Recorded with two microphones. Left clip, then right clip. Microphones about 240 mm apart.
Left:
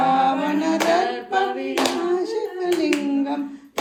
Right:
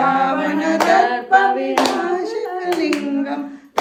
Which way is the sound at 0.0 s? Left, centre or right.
Centre.